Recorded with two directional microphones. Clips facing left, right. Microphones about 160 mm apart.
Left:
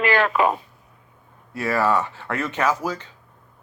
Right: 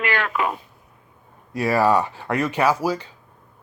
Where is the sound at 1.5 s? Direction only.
15° right (ahead or behind).